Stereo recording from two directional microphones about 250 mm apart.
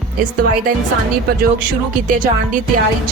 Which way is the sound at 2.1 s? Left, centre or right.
Right.